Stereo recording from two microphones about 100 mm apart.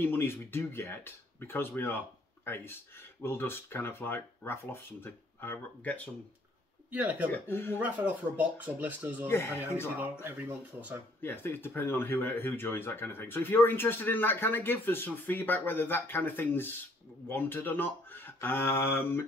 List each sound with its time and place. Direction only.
0.0 s speech: 25° left (ahead or behind)
6.9 s speech: 15° right (ahead or behind)
7.4 s speech: 25° left (ahead or behind)
7.8 s speech: 15° right (ahead or behind)
9.3 s speech: 25° left (ahead or behind)
11.1 s speech: 20° left (ahead or behind)